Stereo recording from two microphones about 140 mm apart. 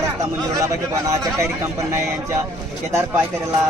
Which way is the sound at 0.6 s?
20° right (ahead or behind).